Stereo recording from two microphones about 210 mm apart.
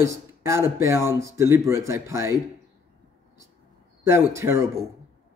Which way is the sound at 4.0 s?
10° right (ahead or behind).